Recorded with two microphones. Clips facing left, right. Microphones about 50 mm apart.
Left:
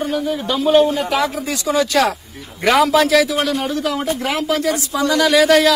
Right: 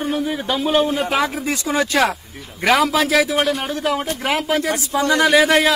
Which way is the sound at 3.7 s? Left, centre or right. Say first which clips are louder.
Left 1 dB; right.